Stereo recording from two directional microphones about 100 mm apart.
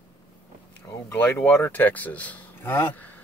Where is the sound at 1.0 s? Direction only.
25° left (ahead or behind).